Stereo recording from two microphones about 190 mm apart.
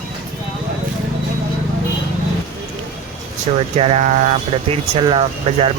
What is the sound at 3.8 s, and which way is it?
Speech, 35° right (ahead or behind).